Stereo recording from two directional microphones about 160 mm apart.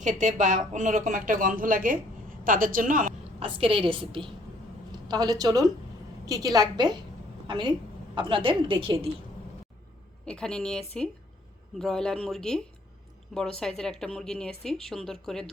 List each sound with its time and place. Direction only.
0.0 s speech: 50° right (ahead or behind)
3.4 s a woman's voice: 35° right (ahead or behind)
10.2 s speech: 5° left (ahead or behind)